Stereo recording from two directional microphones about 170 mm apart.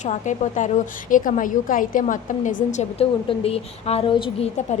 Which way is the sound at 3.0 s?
35° left (ahead or behind).